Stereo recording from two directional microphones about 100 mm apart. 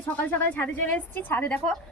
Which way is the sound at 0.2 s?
15° left (ahead or behind).